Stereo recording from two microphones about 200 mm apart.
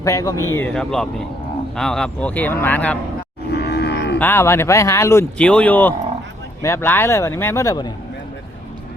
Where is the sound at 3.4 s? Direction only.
55° left (ahead or behind).